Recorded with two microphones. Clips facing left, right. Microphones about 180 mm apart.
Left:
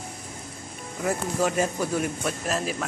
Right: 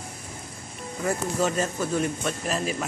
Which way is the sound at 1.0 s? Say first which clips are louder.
Even; 5° left (ahead or behind).